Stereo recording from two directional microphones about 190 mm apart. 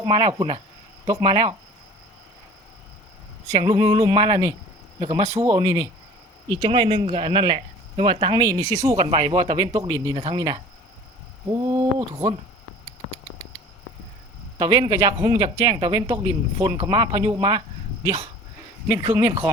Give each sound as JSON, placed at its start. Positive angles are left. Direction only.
{"t": 0.0, "sound": "speech", "side_deg": -25}
{"t": 3.6, "sound": "speech", "side_deg": -30}
{"t": 4.9, "sound": "speech", "side_deg": -35}
{"t": 5.4, "sound": "speech", "side_deg": -25}
{"t": 9.0, "sound": "speech", "side_deg": -30}
{"t": 11.7, "sound": "speech", "side_deg": -20}
{"t": 14.6, "sound": "speech", "side_deg": -20}
{"t": 18.9, "sound": "speech", "side_deg": -20}